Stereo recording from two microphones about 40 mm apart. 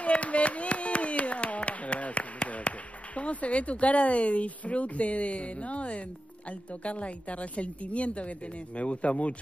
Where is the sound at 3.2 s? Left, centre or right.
Left.